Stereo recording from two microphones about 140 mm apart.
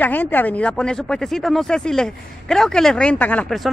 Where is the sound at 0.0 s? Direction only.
10° left (ahead or behind).